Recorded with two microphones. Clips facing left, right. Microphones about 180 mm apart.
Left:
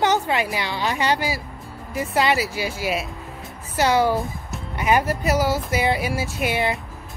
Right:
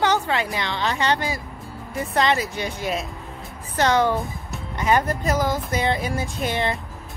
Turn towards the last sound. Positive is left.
turn(degrees=10)  # may be behind; listen again after turning